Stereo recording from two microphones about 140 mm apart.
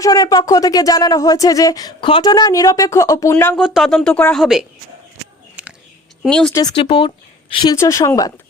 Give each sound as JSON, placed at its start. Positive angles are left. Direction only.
{"t": 0.0, "sound": "speech", "side_deg": 25}
{"t": 3.6, "sound": "speech", "side_deg": 0}
{"t": 6.2, "sound": "speech", "side_deg": 5}
{"t": 6.5, "sound": "speech", "side_deg": 30}
{"t": 7.8, "sound": "speech", "side_deg": 20}